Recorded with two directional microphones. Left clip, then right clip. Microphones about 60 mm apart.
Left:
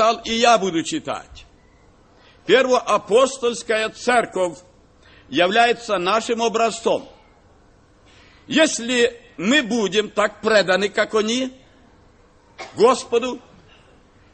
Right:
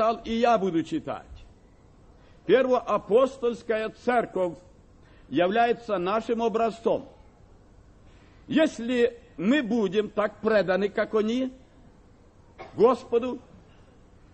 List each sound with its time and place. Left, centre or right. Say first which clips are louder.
0.0 s a man's voice: left 7 dB; centre
2.4 s a man's voice: left 6 dB; centre
8.5 s a man's voice: left 6 dB; centre
12.5 s a man's voice: left 5 dB; centre